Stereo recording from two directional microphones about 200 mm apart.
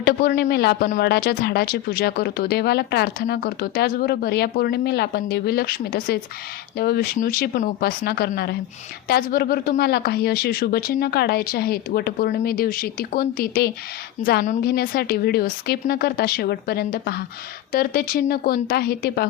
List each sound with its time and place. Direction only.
0.0 s speech: 50° left (ahead or behind)